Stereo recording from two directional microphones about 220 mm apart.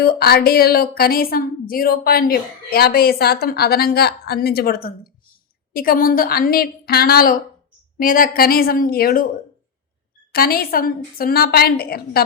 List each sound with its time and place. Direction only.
0.0 s a woman's voice: 45° left (ahead or behind)
10.3 s a woman's voice: 40° left (ahead or behind)